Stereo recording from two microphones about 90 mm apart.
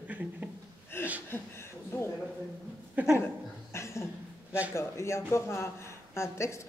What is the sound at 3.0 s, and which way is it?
Speech, 20° right (ahead or behind).